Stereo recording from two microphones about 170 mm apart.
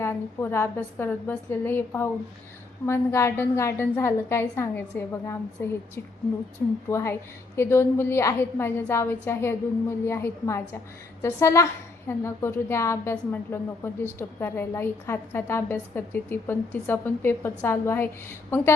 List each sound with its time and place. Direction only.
0.0 s a woman's voice: 15° left (ahead or behind)
6.6 s a woman's voice: 10° left (ahead or behind)